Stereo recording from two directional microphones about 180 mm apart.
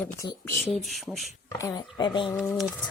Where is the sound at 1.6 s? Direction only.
20° left (ahead or behind).